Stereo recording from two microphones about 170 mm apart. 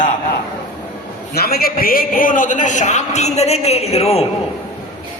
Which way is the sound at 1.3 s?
65° left (ahead or behind).